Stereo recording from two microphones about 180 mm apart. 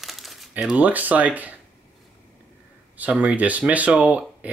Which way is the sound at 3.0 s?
5° right (ahead or behind).